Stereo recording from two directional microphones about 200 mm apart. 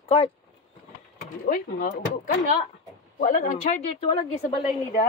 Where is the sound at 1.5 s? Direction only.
40° left (ahead or behind).